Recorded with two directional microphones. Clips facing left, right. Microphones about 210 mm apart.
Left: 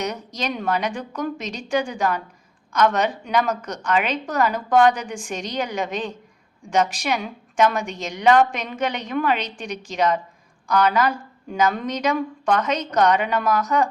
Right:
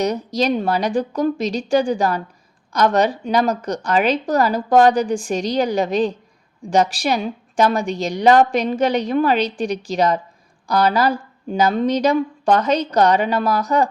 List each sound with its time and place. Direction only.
0.0 s a woman's voice: 35° right (ahead or behind)